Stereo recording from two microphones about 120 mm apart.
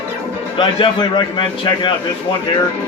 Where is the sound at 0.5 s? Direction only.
45° left (ahead or behind).